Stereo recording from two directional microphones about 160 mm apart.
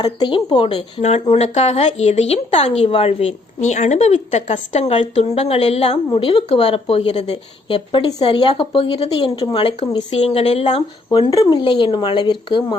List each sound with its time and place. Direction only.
0.0 s speech: 30° left (ahead or behind)